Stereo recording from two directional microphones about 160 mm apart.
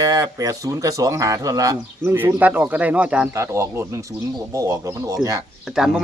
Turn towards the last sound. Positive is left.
turn(degrees=-5)  # may be behind; listen again after turning